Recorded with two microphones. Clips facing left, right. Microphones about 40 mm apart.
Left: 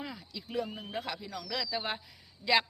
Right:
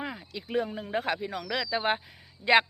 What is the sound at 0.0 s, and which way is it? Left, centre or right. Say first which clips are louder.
Speech: right 5 dB; right.